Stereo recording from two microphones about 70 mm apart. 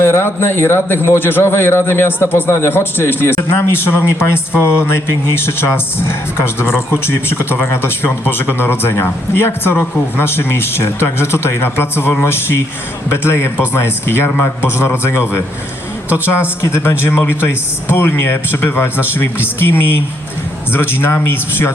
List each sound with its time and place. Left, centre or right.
0.0 s a man's voice: left